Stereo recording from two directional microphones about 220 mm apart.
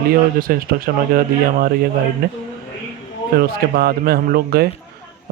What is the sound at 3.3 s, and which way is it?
Speech, 45° right (ahead or behind).